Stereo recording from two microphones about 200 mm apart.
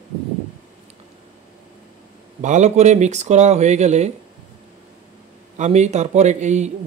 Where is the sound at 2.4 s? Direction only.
35° right (ahead or behind).